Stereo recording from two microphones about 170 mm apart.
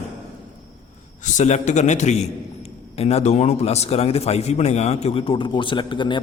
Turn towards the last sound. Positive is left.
turn(degrees=30)  # may be behind; listen again after turning